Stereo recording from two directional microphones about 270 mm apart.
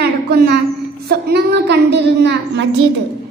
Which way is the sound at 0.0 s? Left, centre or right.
Right.